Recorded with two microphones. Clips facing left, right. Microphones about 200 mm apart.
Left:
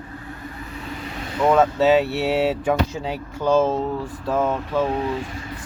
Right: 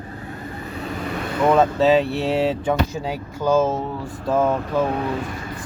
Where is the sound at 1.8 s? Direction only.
5° left (ahead or behind).